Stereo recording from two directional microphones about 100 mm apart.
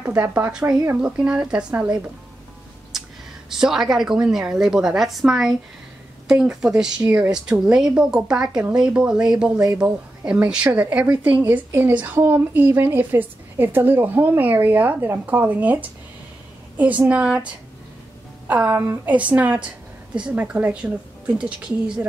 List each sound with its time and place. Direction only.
0.0 s a woman's voice: 20° right (ahead or behind)
3.5 s a woman's voice: 5° right (ahead or behind)